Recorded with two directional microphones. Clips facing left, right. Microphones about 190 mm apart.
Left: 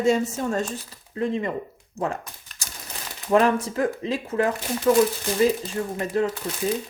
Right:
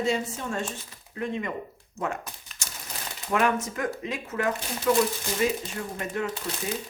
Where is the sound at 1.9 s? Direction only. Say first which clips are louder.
Left 4 dB; 35° left (ahead or behind).